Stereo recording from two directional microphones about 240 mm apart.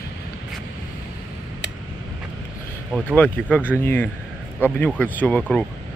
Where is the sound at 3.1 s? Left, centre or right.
Centre.